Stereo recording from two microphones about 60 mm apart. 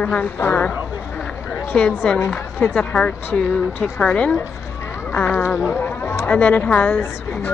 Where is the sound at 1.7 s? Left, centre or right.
Centre.